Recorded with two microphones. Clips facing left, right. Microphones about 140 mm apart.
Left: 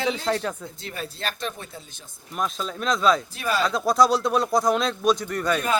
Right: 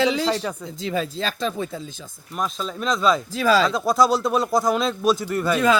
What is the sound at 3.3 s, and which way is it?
Speech, 90° right.